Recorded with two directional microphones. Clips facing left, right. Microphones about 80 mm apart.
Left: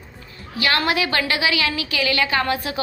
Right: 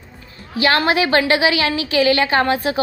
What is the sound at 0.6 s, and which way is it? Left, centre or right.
A woman's voice, right.